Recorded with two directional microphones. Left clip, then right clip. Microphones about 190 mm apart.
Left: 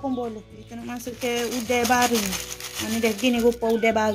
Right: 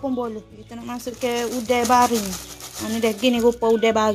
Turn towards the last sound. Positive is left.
turn(degrees=-30)  # may be behind; listen again after turning